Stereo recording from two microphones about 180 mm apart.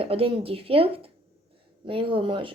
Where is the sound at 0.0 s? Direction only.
30° right (ahead or behind).